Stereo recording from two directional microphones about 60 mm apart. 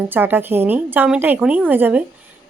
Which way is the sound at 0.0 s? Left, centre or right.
Right.